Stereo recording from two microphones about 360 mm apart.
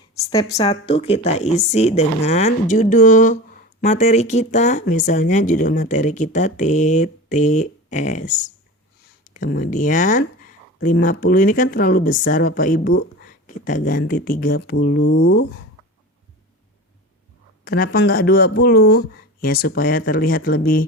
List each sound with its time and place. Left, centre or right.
0.6 s speech: centre
17.7 s speech: left